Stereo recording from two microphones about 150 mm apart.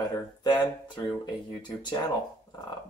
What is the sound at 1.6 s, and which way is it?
Speech, 30° left (ahead or behind).